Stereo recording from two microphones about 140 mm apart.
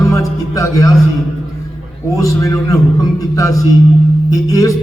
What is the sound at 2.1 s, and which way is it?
A man's voice, 25° left (ahead or behind).